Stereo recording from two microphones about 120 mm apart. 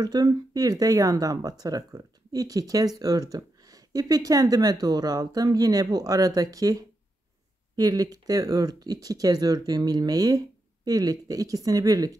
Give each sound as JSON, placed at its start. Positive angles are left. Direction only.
{"t": 0.0, "sound": "speech", "side_deg": -30}